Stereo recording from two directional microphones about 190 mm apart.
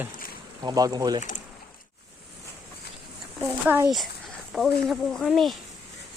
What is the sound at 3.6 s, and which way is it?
Speech, 15° right (ahead or behind).